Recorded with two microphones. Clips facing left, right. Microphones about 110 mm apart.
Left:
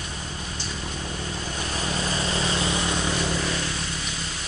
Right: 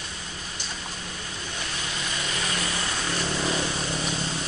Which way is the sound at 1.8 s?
35° left (ahead or behind).